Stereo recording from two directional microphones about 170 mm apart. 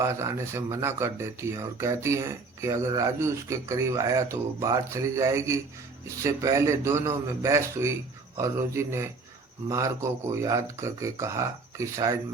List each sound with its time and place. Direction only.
0.0 s speech: 15° right (ahead or behind)